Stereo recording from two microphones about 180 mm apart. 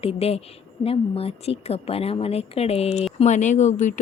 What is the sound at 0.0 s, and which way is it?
Speech, 35° left (ahead or behind).